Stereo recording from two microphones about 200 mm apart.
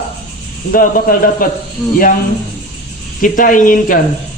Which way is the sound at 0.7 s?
45° left (ahead or behind).